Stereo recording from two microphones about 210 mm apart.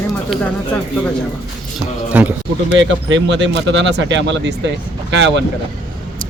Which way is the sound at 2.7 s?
60° right (ahead or behind).